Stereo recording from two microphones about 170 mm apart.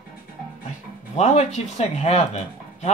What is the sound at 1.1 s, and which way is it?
Speech, 40° left (ahead or behind).